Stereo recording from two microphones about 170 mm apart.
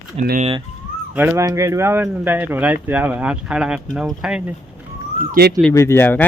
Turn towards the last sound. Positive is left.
turn(degrees=10)  # may be behind; listen again after turning